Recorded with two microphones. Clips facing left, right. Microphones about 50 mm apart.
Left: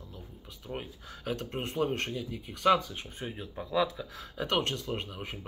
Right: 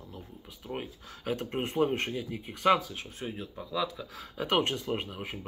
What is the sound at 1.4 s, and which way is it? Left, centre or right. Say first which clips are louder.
Speech: right 4 dB; centre.